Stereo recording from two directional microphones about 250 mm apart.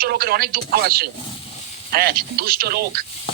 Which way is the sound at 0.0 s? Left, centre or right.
Right.